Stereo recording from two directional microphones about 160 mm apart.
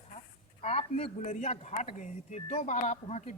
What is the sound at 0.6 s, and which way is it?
Speech, 40° left (ahead or behind).